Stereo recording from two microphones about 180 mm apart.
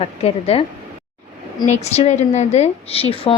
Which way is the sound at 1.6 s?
40° left (ahead or behind).